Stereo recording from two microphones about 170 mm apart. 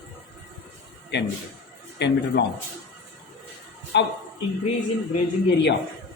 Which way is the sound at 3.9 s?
90° left.